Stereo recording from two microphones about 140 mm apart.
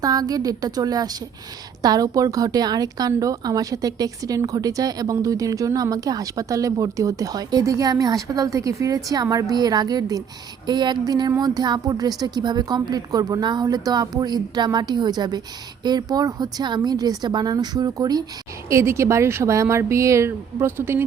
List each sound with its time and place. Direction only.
0.0 s a woman's voice: 25° right (ahead or behind)